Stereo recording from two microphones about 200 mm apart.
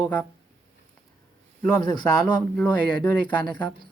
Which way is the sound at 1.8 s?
20° left (ahead or behind).